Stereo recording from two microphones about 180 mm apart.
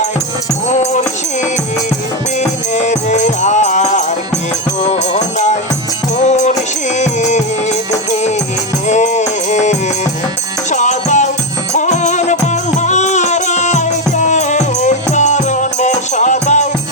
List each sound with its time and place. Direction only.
0.7 s music: 40° left (ahead or behind)
2.4 s music: 40° left (ahead or behind)
8.9 s music: 40° left (ahead or behind)